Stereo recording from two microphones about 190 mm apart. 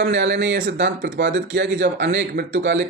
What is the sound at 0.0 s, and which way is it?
Speech, 65° right (ahead or behind).